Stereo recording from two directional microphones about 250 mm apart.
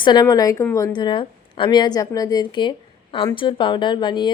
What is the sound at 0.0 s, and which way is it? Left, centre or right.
A woman's voice, centre.